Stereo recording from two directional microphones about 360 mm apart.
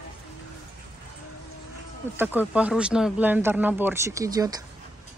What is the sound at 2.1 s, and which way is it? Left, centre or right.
Speech, centre.